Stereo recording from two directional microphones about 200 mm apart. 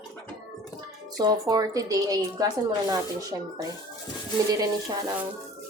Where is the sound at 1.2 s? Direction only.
20° right (ahead or behind).